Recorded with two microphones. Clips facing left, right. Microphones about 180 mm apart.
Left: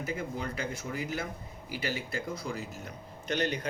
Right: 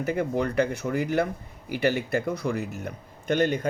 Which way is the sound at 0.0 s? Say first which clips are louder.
Right 9 dB; 65° right (ahead or behind).